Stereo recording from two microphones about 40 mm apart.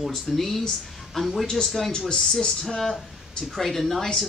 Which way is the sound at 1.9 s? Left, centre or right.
Centre.